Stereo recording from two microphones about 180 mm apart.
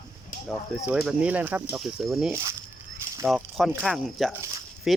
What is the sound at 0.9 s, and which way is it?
Speech, 5° right (ahead or behind).